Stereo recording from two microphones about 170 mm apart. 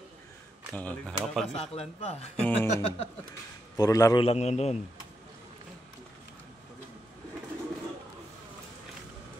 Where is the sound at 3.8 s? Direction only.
20° left (ahead or behind).